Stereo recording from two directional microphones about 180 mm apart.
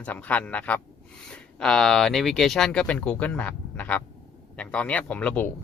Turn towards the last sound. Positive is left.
turn(degrees=10)  # may be behind; listen again after turning